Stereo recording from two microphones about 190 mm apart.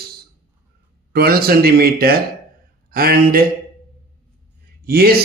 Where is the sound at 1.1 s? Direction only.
55° right (ahead or behind).